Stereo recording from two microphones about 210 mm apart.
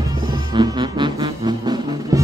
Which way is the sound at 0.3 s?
20° right (ahead or behind).